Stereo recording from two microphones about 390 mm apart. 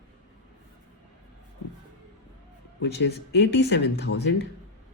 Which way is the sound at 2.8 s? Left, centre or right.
Left.